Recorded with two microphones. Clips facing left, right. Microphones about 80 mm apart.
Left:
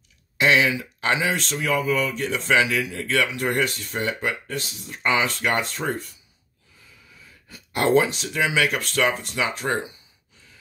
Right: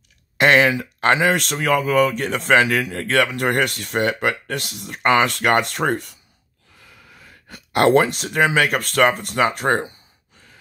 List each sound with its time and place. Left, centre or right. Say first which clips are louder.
0.4 s speech: right 4 dB; right